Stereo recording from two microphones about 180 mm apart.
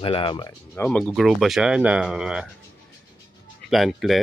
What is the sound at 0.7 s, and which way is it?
Speech, 10° left (ahead or behind).